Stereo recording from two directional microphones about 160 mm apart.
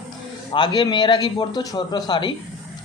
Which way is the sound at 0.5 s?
30° left (ahead or behind).